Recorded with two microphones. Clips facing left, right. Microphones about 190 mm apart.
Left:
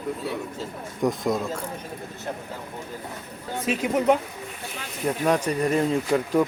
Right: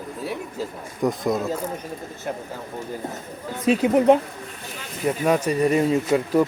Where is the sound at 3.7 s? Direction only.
30° right (ahead or behind).